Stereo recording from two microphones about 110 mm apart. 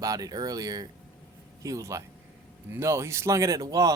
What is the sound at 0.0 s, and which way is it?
Speech, 35° right (ahead or behind).